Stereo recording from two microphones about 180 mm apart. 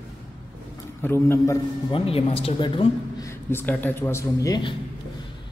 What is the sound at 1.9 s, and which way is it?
Speech, 30° left (ahead or behind).